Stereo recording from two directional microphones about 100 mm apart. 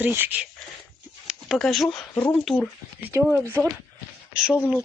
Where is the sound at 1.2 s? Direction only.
Centre (ahead or behind).